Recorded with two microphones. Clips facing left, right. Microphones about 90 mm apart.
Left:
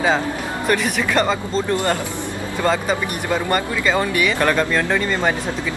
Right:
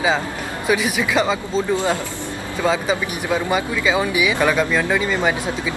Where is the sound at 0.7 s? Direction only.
5° right (ahead or behind).